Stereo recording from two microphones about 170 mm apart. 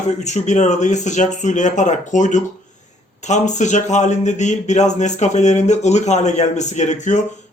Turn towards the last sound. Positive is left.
turn(degrees=45)  # may be behind; listen again after turning